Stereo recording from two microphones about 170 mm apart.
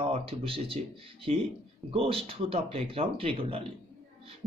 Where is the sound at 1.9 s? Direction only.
35° right (ahead or behind).